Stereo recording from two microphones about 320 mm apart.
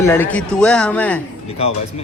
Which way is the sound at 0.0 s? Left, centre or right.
Centre.